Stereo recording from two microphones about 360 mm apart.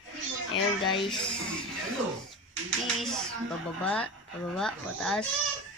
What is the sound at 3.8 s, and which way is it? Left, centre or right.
Speech, centre.